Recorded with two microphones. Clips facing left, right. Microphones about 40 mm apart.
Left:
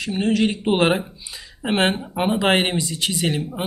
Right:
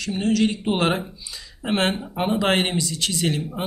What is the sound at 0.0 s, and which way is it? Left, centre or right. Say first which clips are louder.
A man's voice: left 1 dB; centre.